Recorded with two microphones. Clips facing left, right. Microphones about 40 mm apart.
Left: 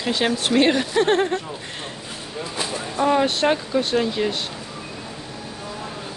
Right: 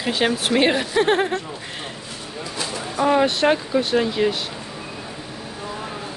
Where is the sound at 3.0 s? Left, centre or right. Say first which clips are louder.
Right 1 dB; centre.